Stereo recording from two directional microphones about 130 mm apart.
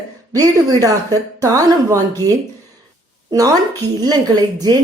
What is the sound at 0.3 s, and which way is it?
A woman's voice, 30° right (ahead or behind).